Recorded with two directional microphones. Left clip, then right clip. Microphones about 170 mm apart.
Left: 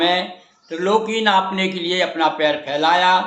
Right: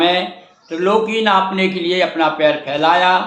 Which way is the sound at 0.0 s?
15° left (ahead or behind).